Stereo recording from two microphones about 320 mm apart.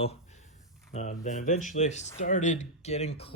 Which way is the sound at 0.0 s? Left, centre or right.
Centre.